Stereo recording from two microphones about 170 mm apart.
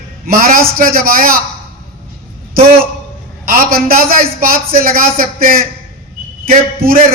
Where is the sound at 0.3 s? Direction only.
55° right (ahead or behind).